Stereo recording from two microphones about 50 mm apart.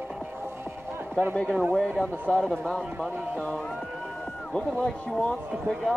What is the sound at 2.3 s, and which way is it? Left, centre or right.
Speech, centre.